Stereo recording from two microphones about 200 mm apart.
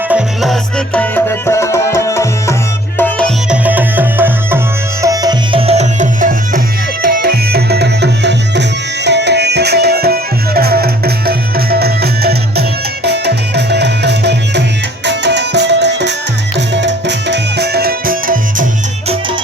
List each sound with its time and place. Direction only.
0.9 s music: 10° left (ahead or behind)
3.5 s music: 10° right (ahead or behind); by 18.6 s 45° right (ahead or behind)